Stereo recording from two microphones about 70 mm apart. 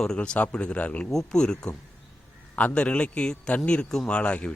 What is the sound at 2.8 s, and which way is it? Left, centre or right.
A man's voice, centre.